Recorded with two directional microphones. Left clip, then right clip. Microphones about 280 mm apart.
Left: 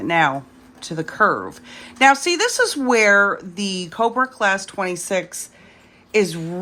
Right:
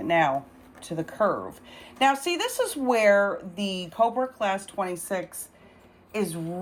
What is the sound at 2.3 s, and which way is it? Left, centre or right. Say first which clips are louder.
Speech: left 8 dB; left.